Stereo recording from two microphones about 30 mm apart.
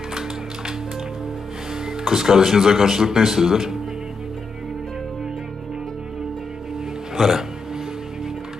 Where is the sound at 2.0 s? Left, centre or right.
Centre.